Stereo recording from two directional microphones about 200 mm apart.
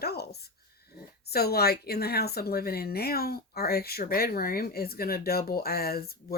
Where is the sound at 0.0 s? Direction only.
50° left (ahead or behind).